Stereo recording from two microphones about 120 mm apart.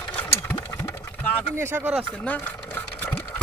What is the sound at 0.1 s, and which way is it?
Engine, 15° left (ahead or behind).